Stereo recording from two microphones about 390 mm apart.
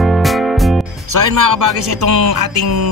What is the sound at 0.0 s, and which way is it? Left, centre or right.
Music, centre.